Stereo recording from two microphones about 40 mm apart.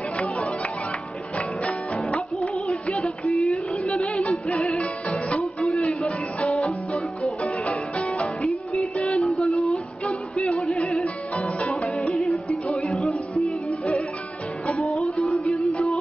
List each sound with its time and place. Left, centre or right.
2.1 s music: left
3.3 s a sound: centre
3.9 s music: centre
5.6 s music: centre
7.4 s music: left
8.4 s music: centre
11.3 s music: left
12.9 s music: centre
14.8 s music: centre
15.4 s music: left